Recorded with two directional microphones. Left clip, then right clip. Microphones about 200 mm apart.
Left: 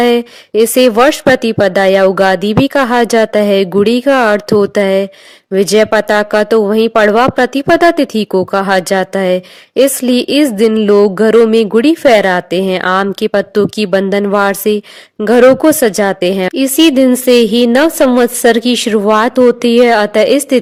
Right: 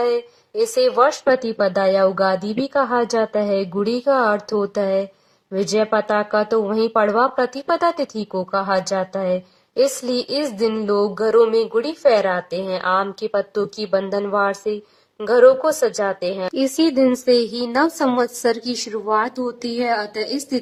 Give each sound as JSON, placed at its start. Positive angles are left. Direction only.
{"t": 0.0, "sound": "speech", "side_deg": 35}